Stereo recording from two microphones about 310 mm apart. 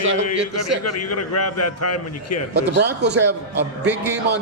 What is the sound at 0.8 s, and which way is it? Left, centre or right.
A man's voice, left.